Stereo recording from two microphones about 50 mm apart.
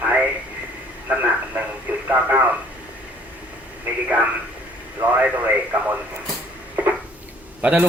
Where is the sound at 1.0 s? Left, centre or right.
Right.